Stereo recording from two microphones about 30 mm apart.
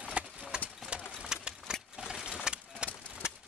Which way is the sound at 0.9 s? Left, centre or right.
Right.